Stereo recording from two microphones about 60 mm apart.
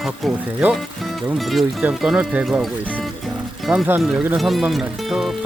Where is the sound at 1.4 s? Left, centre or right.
Centre.